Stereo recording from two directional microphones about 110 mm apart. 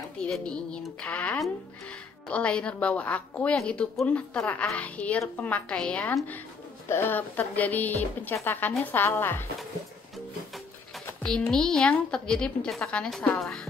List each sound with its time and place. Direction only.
0.3 s a woman's voice: 10° left (ahead or behind)
11.2 s a woman's voice: 5° left (ahead or behind)